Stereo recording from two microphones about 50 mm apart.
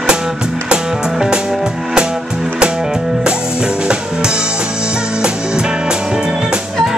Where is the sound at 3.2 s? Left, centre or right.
Centre.